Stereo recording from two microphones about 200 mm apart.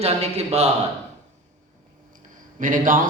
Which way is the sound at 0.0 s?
30° right (ahead or behind).